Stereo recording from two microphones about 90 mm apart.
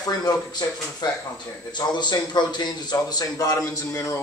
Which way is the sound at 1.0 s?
55° left (ahead or behind).